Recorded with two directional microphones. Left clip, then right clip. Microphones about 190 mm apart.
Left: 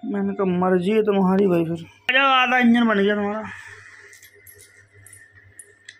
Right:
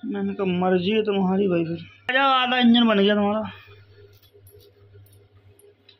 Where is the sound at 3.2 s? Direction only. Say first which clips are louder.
Right 2 dB; 35° right (ahead or behind).